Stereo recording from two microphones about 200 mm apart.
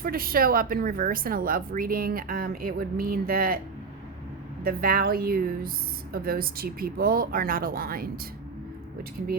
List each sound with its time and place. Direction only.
0.0 s a woman's voice: 45° right (ahead or behind)
4.6 s a woman's voice: 50° right (ahead or behind)